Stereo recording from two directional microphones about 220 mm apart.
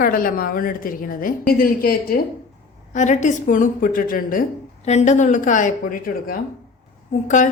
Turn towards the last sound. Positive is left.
turn(degrees=35)  # may be behind; listen again after turning